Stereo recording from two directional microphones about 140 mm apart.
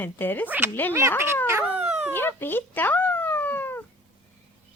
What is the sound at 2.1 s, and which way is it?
Cat, 15° left (ahead or behind).